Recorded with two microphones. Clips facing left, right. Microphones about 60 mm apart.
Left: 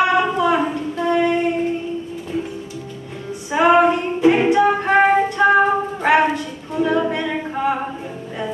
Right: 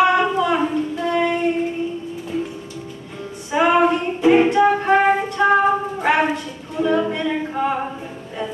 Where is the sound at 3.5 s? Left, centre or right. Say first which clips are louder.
Left 2 dB; centre.